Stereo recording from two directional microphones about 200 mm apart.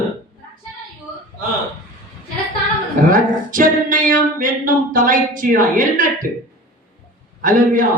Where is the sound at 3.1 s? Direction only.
45° right (ahead or behind).